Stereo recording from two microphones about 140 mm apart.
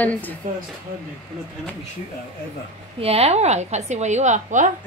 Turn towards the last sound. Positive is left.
turn(degrees=-60)  # may be behind; listen again after turning